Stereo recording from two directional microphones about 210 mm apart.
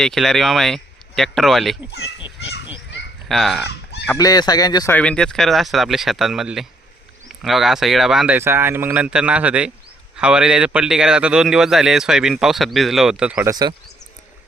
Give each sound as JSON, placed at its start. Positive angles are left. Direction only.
{"t": 0.0, "sound": "a man's voice", "side_deg": 0}
{"t": 3.2, "sound": "a man's voice", "side_deg": 0}
{"t": 4.0, "sound": "fowl", "side_deg": 15}
{"t": 4.9, "sound": "a man's voice", "side_deg": 5}
{"t": 13.5, "sound": "speech", "side_deg": -20}